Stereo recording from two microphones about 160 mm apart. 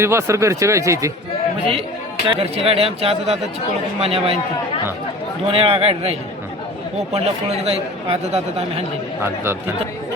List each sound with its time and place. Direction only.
0.0 s speech: 15° right (ahead or behind)
2.2 s speech: 35° right (ahead or behind)
5.5 s speech: 35° right (ahead or behind)
9.2 s speech: 15° right (ahead or behind)